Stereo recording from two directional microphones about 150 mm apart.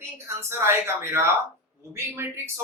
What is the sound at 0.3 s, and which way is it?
Speech, 15° right (ahead or behind).